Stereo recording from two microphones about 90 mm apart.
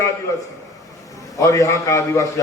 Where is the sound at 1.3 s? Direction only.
35° left (ahead or behind).